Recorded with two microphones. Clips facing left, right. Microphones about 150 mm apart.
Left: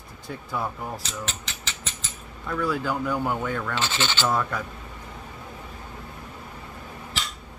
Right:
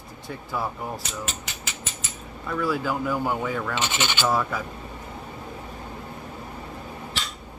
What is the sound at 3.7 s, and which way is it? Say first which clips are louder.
Coin: even; 15° right (ahead or behind).